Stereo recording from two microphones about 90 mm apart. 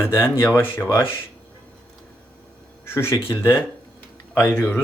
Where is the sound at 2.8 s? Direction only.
25° left (ahead or behind).